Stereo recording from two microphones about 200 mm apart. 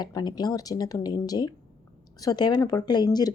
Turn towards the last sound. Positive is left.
turn(degrees=20)  # may be behind; listen again after turning